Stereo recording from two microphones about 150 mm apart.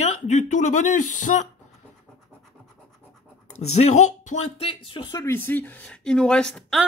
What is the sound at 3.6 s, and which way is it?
Speech, 45° left (ahead or behind).